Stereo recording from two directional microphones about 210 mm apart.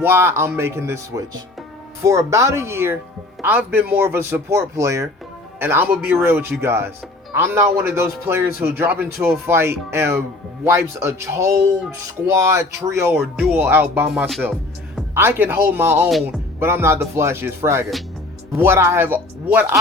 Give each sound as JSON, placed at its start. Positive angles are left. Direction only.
{"t": 0.0, "sound": "a man's voice", "side_deg": -10}
{"t": 15.1, "sound": "speech", "side_deg": -10}